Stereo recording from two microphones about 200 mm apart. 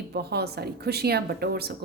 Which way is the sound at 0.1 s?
55° right (ahead or behind).